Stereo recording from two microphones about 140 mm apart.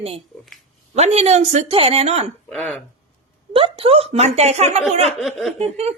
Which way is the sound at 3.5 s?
40° right (ahead or behind).